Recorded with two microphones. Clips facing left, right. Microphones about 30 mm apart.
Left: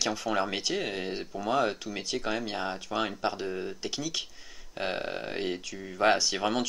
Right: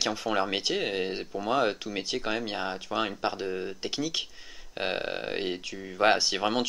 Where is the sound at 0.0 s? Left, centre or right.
Centre.